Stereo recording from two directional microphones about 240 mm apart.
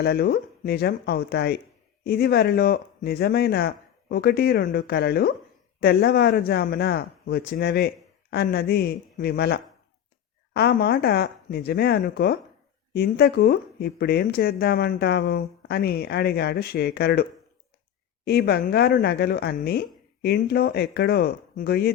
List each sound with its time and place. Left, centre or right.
0.0 s speech: left
18.3 s speech: left